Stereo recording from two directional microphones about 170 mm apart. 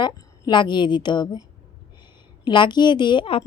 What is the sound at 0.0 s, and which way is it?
A woman's voice, 25° left (ahead or behind).